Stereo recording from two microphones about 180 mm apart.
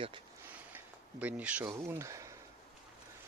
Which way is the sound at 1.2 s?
10° right (ahead or behind).